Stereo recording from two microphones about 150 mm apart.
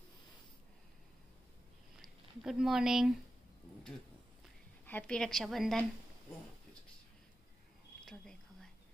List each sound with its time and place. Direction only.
2.0 s speech: 5° right (ahead or behind)
4.8 s a woman's voice: 10° left (ahead or behind)
8.0 s a sound: centre (ahead or behind)